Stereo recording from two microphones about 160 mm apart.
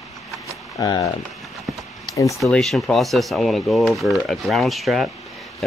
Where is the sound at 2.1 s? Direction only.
20° left (ahead or behind).